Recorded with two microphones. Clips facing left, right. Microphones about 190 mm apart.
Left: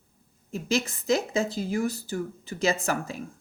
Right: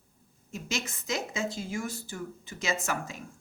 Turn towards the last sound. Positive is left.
turn(degrees=35)  # may be behind; listen again after turning